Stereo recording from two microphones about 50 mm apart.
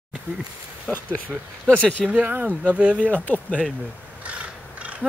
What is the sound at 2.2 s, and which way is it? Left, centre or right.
Speech, right.